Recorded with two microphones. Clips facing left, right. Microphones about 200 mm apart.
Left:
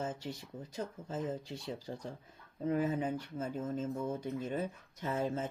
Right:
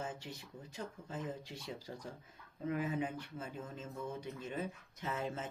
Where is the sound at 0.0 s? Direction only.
40° left (ahead or behind).